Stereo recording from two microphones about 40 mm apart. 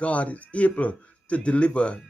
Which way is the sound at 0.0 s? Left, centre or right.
Left.